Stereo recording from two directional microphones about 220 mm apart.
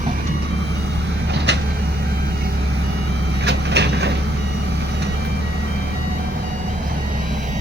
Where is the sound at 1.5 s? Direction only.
50° right (ahead or behind).